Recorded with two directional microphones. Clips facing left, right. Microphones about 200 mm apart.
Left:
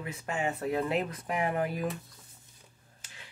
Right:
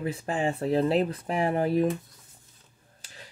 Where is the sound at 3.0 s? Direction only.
35° right (ahead or behind).